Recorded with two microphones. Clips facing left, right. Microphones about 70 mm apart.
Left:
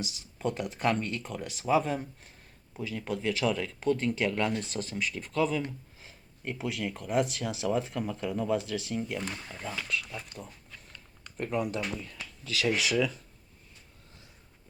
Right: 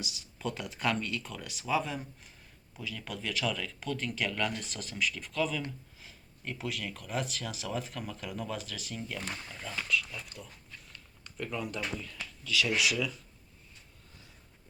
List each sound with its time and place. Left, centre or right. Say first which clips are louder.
0.0 s speech: left 4 dB; left
2.7 s speech: left 6 dB; left
10.2 s speech: left 3 dB; left
11.6 s speech: left 4 dB; centre
12.0 s speech: even; left